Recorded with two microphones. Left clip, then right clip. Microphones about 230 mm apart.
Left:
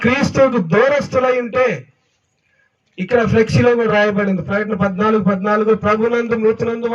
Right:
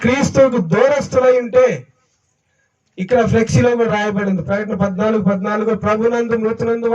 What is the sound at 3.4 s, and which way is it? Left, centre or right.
A man's voice, right.